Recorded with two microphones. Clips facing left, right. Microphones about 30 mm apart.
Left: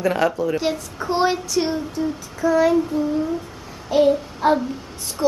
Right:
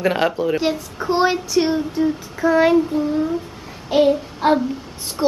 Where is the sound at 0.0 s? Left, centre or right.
Right.